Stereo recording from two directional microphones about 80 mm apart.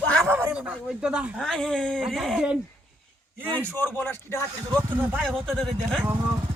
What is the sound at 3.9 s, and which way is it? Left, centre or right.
Speech, left.